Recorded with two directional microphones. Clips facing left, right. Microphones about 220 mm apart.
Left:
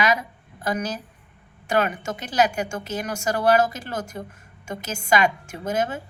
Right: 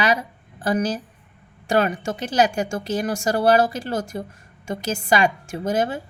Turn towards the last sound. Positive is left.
turn(degrees=-35)  # may be behind; listen again after turning